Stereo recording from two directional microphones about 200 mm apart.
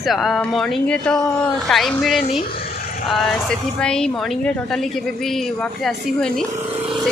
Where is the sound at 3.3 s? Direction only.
5° left (ahead or behind).